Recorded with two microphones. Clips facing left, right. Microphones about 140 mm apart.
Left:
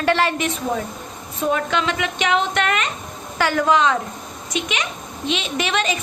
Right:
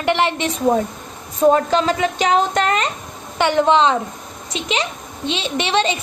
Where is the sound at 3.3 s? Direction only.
25° right (ahead or behind).